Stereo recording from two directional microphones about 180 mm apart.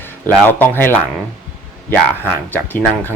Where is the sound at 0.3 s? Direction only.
10° left (ahead or behind).